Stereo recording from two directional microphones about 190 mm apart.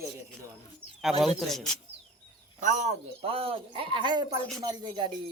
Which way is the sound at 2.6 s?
40° right (ahead or behind).